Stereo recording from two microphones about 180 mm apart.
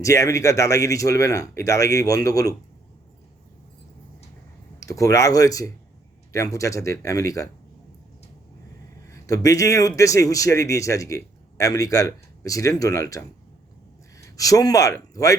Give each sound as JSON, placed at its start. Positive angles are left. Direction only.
{"t": 0.0, "sound": "a man's voice", "side_deg": 15}
{"t": 4.8, "sound": "a man's voice", "side_deg": 20}
{"t": 9.0, "sound": "a man's voice", "side_deg": 20}